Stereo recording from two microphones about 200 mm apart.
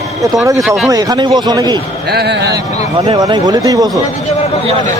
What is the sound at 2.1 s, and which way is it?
Speech, 55° right (ahead or behind).